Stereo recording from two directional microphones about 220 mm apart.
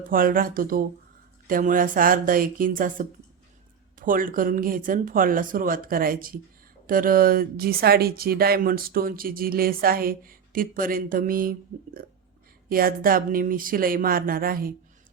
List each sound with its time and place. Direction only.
0.1 s speech: 40° right (ahead or behind)
12.6 s speech: 40° right (ahead or behind)